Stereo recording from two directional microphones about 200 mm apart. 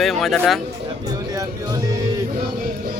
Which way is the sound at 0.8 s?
20° right (ahead or behind).